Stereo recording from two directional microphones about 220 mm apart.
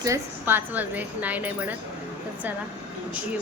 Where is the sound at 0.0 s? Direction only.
10° right (ahead or behind).